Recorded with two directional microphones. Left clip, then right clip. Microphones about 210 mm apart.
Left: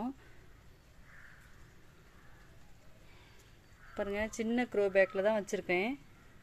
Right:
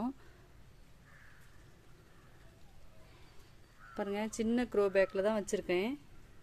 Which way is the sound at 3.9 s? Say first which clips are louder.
Left 2 dB; 10° right (ahead or behind).